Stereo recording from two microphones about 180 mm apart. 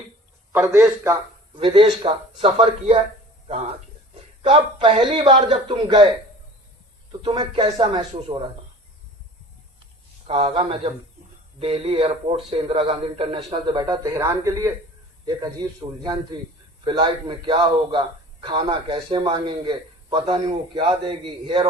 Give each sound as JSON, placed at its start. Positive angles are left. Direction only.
{"t": 0.5, "sound": "a man's voice", "side_deg": -10}
{"t": 1.5, "sound": "a man's voice", "side_deg": -30}
{"t": 7.2, "sound": "a man's voice", "side_deg": -25}
{"t": 10.2, "sound": "a man's voice", "side_deg": -30}